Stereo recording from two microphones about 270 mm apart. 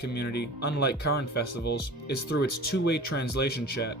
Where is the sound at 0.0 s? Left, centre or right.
Left.